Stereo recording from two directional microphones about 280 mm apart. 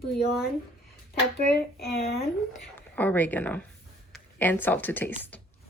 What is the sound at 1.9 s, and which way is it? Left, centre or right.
Speech, left.